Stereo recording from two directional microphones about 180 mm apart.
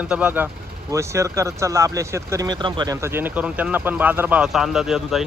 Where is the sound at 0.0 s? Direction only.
10° right (ahead or behind).